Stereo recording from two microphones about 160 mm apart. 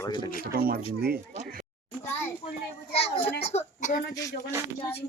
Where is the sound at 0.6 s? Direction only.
65° right (ahead or behind).